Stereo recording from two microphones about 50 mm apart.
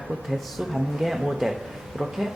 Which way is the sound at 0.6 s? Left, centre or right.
Centre.